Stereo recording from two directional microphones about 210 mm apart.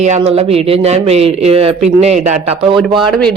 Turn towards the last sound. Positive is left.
turn(degrees=0)  # may be behind; listen again after turning